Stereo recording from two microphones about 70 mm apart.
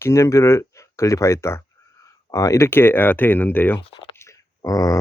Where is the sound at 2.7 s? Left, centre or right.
Left.